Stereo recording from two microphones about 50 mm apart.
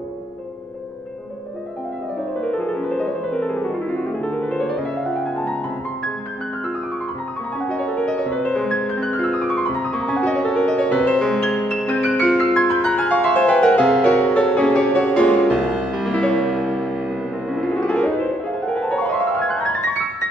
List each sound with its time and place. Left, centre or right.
2.4 s piano: left
5.1 s music: left
7.6 s music: centre
8.5 s piano: centre
9.7 s music: centre
10.2 s music: left
10.9 s music: centre
15.5 s music: centre
16.1 s music: centre
17.6 s music: centre